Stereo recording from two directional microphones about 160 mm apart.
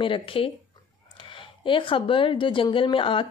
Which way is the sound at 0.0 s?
35° left (ahead or behind).